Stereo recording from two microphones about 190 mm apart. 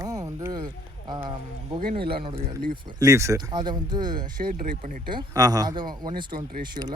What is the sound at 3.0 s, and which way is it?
Speech, 15° right (ahead or behind).